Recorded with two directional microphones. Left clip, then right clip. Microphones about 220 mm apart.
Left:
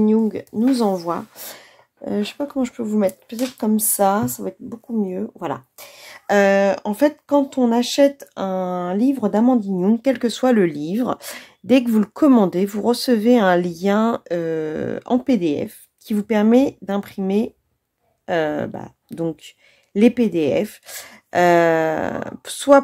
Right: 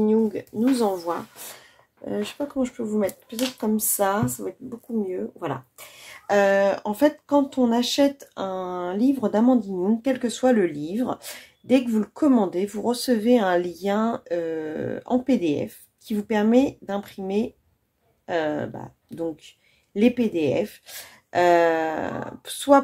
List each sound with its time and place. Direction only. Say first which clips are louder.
0.0 s speech: left 2 dB; 35° left (ahead or behind)